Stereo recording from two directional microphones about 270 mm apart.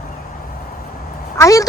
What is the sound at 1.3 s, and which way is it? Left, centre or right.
Speech, centre.